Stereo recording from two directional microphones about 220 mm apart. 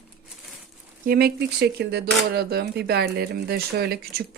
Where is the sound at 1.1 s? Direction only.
45° right (ahead or behind).